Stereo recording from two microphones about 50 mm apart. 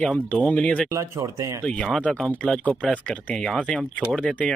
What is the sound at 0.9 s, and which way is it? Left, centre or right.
Speech, right.